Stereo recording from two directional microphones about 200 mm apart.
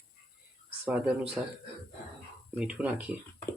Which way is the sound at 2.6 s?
5° right (ahead or behind).